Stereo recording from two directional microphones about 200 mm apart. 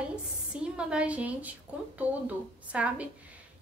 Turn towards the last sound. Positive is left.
turn(degrees=-5)  # may be behind; listen again after turning